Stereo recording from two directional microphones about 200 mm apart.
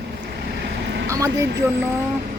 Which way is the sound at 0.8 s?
65° right (ahead or behind).